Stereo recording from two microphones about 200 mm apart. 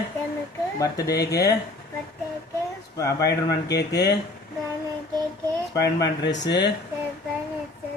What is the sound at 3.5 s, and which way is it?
Speech, 55° left (ahead or behind).